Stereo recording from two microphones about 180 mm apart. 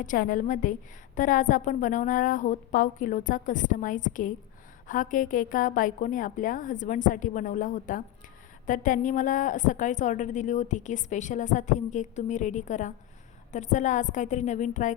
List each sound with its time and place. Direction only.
0.0 s a woman's voice: 50° left (ahead or behind)